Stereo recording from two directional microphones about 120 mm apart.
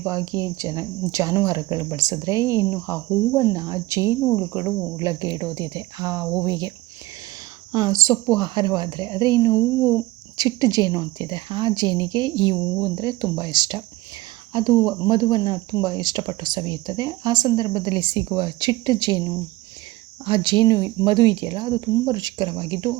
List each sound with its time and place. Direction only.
0.1 s speech: 30° right (ahead or behind)